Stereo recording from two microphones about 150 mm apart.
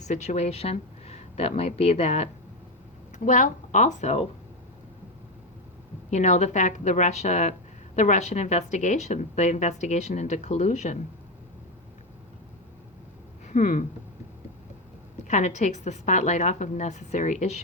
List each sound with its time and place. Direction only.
0.0 s speech: 50° left (ahead or behind)
3.2 s a woman's voice: 60° left (ahead or behind)
6.1 s a woman's voice: 50° left (ahead or behind)
13.5 s a sound: 55° left (ahead or behind)
15.3 s a woman's voice: 50° left (ahead or behind)